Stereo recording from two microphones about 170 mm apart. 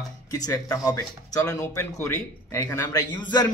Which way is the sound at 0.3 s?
20° left (ahead or behind).